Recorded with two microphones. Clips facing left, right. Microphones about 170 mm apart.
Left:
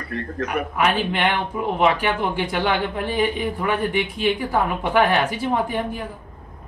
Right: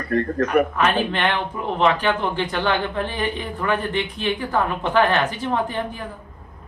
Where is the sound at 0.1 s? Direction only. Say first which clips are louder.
Right 7 dB; 50° right (ahead or behind).